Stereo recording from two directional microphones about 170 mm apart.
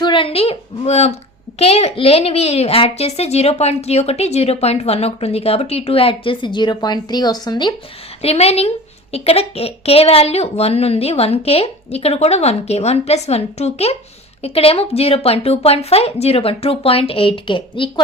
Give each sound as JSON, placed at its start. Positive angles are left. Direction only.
{"t": 0.0, "sound": "a woman's voice", "side_deg": 30}
{"t": 8.2, "sound": "a child's voice", "side_deg": 35}